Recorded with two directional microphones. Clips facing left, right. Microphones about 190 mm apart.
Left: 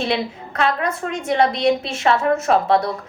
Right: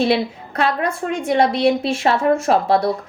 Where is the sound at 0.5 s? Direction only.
35° right (ahead or behind).